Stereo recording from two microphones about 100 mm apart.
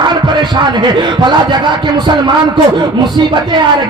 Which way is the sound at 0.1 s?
50° right (ahead or behind).